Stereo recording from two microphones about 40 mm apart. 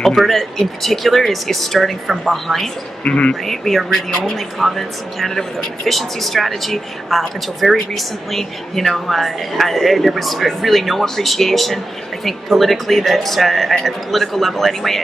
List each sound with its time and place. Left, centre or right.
0.1 s speech: centre
3.0 s speech: left
3.4 s speech: centre